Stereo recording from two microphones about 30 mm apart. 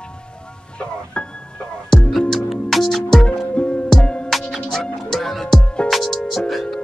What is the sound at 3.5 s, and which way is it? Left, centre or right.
Music, left.